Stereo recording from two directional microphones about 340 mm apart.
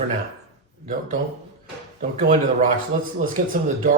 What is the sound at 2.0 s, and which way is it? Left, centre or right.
Speech, right.